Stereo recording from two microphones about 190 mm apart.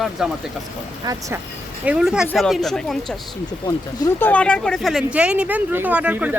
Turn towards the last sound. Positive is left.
turn(degrees=-10)  # may be behind; listen again after turning